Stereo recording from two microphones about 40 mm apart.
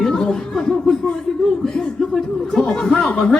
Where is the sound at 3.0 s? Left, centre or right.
Left.